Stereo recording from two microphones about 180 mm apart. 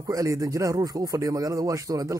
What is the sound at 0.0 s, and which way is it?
Speech, 20° right (ahead or behind).